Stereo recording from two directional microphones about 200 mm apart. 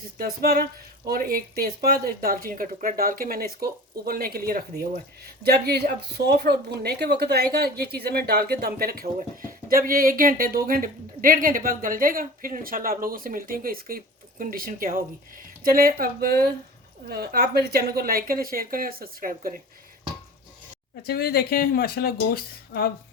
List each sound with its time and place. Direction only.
0.2 s speech: 50° right (ahead or behind)
21.1 s speech: 50° left (ahead or behind)